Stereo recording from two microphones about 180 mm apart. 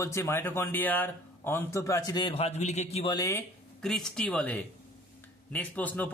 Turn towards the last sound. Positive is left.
turn(degrees=10)  # may be behind; listen again after turning